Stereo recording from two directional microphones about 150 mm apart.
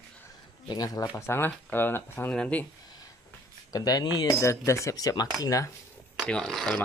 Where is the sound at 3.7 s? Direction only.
25° left (ahead or behind).